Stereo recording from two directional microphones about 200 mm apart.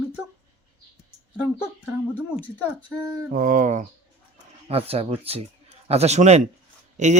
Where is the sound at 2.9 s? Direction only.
20° right (ahead or behind).